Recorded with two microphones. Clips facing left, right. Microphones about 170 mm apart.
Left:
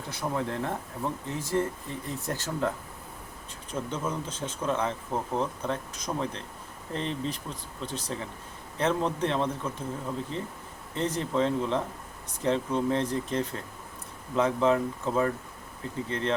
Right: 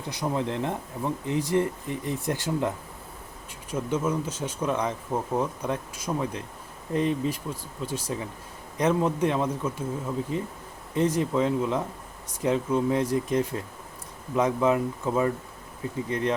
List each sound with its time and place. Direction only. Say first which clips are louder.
0.1 s speech: right 3 dB; 20° right (ahead or behind)